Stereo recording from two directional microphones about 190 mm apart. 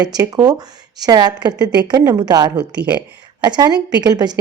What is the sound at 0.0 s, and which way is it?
Speech, 20° right (ahead or behind).